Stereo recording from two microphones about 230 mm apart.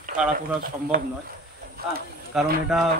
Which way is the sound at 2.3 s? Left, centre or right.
Centre.